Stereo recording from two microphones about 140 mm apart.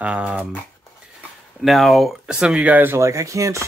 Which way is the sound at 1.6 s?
Centre (ahead or behind).